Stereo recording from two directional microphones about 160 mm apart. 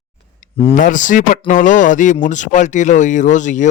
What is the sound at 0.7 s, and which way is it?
Speech, 55° left (ahead or behind).